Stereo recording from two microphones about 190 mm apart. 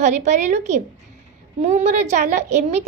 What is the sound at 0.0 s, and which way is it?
A woman's voice, 40° right (ahead or behind).